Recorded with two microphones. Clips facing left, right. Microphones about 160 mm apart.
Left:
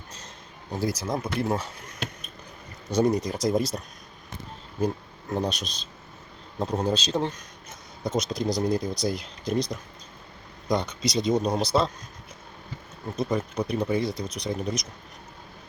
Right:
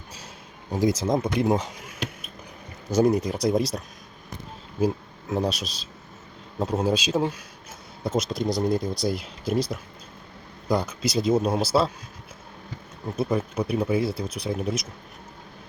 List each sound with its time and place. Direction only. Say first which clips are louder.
0.7 s speech: right 6 dB; 20° right (ahead or behind); by 3.8 s centre (ahead or behind)
5.3 s speech: right 2 dB; 5° right (ahead or behind)
13.1 s speech: right 2 dB; 5° right (ahead or behind)